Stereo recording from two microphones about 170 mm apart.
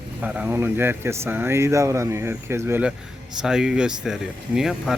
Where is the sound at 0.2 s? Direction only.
5° right (ahead or behind).